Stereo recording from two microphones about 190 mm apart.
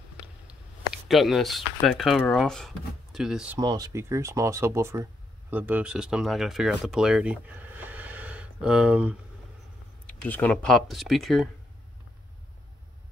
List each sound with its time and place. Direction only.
0.5 s speech: centre (ahead or behind)
3.5 s speech: 20° right (ahead or behind)
10.0 s speech: 10° left (ahead or behind)